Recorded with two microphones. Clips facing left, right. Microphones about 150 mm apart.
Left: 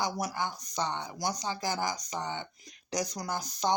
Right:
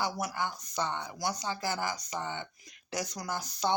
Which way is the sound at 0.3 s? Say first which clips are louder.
Left 1 dB; 15° left (ahead or behind).